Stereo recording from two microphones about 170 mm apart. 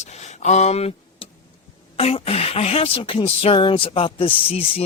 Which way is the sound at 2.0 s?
35° left (ahead or behind).